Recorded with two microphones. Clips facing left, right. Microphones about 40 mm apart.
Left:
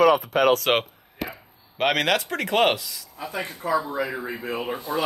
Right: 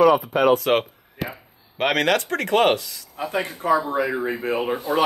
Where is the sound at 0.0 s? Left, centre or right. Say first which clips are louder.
Right 2 dB; left.